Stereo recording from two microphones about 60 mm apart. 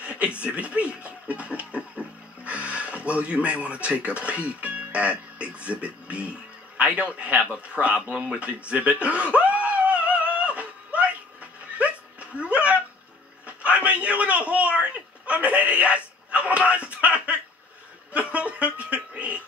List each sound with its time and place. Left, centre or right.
0.0 s a man's voice: right
7.6 s chuckle: right
11.8 s hiccup: right
13.5 s a sound: right